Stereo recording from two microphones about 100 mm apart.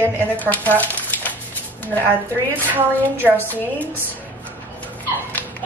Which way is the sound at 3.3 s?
20° left (ahead or behind).